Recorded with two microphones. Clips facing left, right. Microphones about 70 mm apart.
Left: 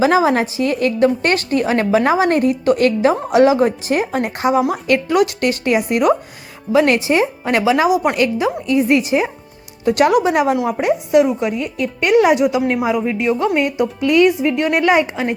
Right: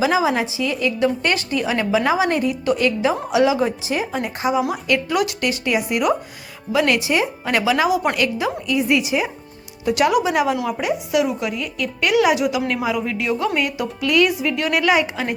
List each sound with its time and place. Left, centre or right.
0.0 s a woman's voice: left
4.6 s a woman's voice: left